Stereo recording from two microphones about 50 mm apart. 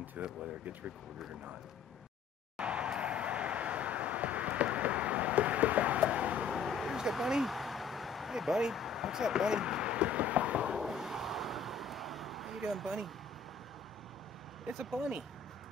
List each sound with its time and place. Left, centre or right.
0.2 s speech: right
2.5 s vehicle: right
6.5 s vehicle: centre; by 10.8 s right
10.8 s a sound: centre
14.7 s speech: centre